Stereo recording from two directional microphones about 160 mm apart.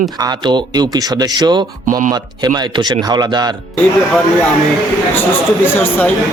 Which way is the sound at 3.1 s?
25° right (ahead or behind).